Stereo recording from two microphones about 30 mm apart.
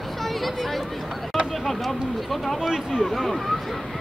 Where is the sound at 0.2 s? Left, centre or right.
Centre.